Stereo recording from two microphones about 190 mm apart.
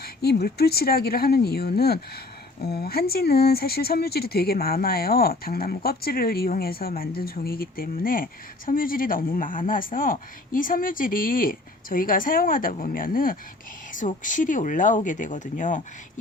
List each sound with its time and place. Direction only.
0.0 s speech: 55° left (ahead or behind); by 15.8 s 40° left (ahead or behind)